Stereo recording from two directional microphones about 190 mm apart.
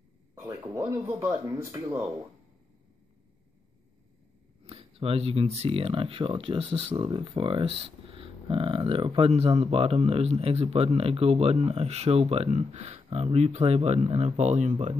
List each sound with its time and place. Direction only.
0.3 s speech: 20° right (ahead or behind)
4.6 s speech: 30° right (ahead or behind)